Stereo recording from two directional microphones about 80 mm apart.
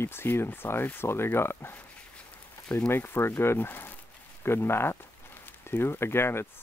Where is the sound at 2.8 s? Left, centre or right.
Left.